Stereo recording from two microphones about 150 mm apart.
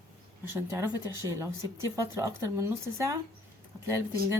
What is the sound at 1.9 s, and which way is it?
Speech, 20° right (ahead or behind).